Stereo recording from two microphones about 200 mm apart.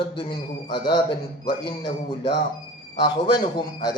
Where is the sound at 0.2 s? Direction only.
20° left (ahead or behind).